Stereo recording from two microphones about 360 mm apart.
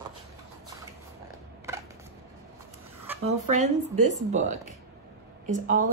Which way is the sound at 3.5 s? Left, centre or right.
Centre.